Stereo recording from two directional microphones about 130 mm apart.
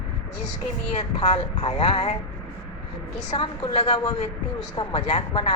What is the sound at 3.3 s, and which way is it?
Speech, 30° left (ahead or behind).